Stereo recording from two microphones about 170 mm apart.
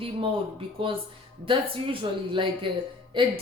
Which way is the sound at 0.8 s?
30° right (ahead or behind).